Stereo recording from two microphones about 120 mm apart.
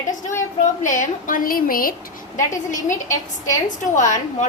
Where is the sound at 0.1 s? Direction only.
90° left.